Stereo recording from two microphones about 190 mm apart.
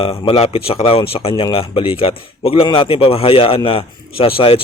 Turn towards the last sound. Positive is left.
turn(degrees=30)  # may be behind; listen again after turning